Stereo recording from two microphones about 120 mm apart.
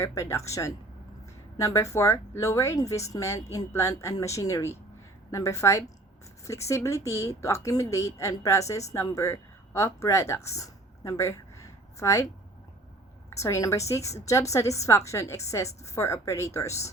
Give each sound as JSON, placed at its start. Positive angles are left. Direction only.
{"t": 0.0, "sound": "speech", "side_deg": 25}
{"t": 13.3, "sound": "speech", "side_deg": 25}